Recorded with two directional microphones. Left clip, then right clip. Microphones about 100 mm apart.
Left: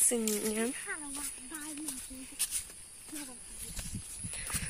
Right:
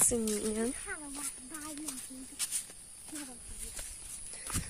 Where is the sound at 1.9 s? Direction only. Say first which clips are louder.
Even; 15° right (ahead or behind).